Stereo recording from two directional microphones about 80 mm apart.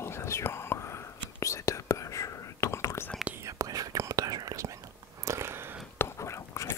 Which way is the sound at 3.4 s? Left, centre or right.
Right.